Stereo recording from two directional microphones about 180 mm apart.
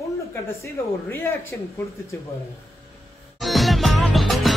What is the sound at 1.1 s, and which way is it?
Speech, 10° left (ahead or behind).